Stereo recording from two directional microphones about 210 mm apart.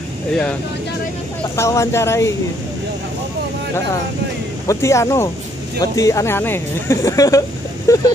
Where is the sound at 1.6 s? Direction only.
15° left (ahead or behind).